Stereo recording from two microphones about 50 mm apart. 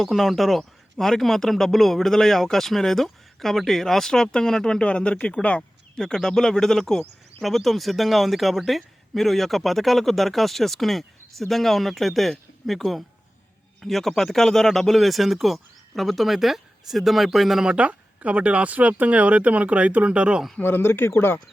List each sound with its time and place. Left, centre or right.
0.0 s a man's voice: centre; by 5.6 s left
6.2 s a man's voice: centre
17.7 s speech: right
20.6 s speech: left